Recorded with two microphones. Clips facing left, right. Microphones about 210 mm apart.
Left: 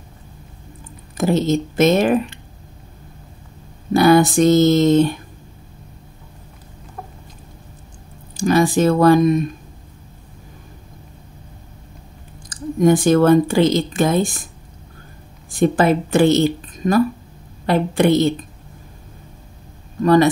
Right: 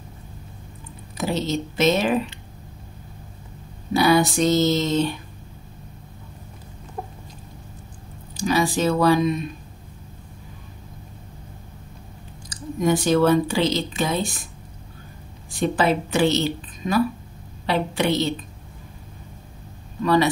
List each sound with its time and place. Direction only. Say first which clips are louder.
1.1 s speech: left 7 dB; 50° left (ahead or behind)
3.9 s speech: left 6 dB; 50° left (ahead or behind)
8.4 s speech: left 6 dB; 50° left (ahead or behind)
12.4 s speech: left 7 dB; 50° left (ahead or behind)
15.5 s speech: left 5 dB; 50° left (ahead or behind)
20.0 s speech: left 6 dB; 45° left (ahead or behind)